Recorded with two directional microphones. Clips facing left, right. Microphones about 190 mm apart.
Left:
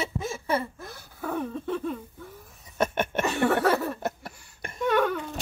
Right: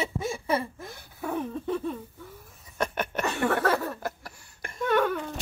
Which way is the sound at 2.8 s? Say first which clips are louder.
Left 3 dB; 25° left (ahead or behind).